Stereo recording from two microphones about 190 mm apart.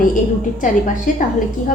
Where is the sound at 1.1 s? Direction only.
45° left (ahead or behind).